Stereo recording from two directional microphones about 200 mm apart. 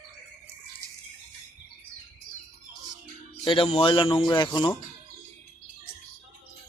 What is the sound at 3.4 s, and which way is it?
Speech, 30° left (ahead or behind).